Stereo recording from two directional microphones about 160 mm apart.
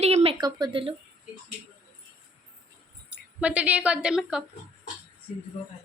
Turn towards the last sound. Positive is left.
turn(degrees=-5)  # may be behind; listen again after turning